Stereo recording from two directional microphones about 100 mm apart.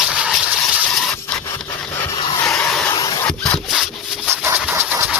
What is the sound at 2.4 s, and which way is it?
Vehicle, 15° left (ahead or behind).